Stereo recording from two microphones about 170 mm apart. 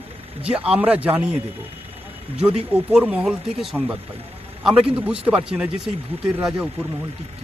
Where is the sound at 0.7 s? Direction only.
10° right (ahead or behind).